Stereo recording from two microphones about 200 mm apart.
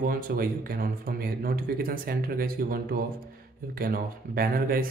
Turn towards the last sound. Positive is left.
turn(degrees=-45)  # may be behind; listen again after turning